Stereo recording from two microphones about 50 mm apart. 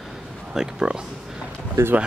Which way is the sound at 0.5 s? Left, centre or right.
Centre.